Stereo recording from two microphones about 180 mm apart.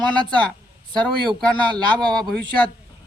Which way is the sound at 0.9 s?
25° right (ahead or behind).